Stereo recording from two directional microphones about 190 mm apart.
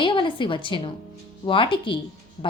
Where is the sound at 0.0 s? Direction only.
25° left (ahead or behind).